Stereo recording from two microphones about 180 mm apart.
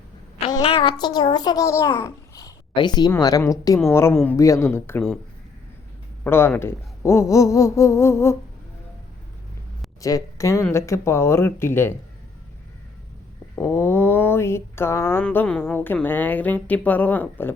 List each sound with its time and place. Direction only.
0.5 s a child's voice: 30° left (ahead or behind)
4.1 s mantra: 10° left (ahead or behind)
6.2 s mantra: 15° left (ahead or behind)
10.0 s mantra: 20° left (ahead or behind)
13.6 s mantra: 15° left (ahead or behind)